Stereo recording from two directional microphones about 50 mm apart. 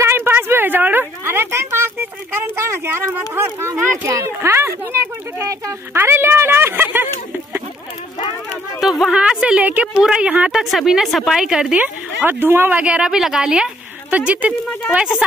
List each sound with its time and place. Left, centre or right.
0.0 s a sound: right
2.4 s speech: right
5.9 s speech: right
8.8 s speech: centre
9.1 s a woman's voice: right
9.6 s speech: right
9.9 s a woman's voice: centre
10.5 s a woman's voice: centre
11.7 s speech: right
12.3 s speech: right
12.7 s a woman's voice: right
13.1 s a woman's voice: centre
14.1 s speech: right